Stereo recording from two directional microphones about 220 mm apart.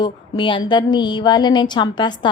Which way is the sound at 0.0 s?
20° left (ahead or behind).